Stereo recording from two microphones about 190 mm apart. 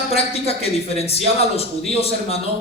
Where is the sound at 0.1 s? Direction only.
30° left (ahead or behind).